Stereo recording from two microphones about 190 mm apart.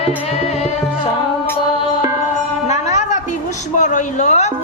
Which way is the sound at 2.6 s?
35° left (ahead or behind).